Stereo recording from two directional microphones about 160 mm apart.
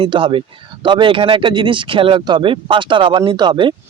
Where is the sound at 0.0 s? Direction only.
35° right (ahead or behind).